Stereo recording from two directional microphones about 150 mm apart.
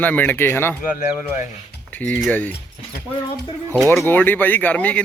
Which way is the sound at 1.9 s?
10° left (ahead or behind).